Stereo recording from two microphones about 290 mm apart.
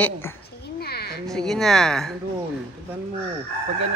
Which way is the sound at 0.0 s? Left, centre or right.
Centre.